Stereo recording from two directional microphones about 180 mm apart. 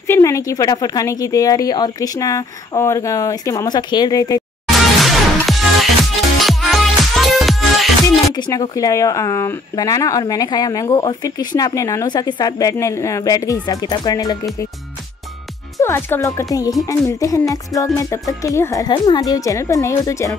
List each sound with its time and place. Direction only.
0.0 s speech: 15° left (ahead or behind)
4.6 s music: centre (ahead or behind)
8.4 s speech: 20° left (ahead or behind)
15.8 s speech: 15° left (ahead or behind)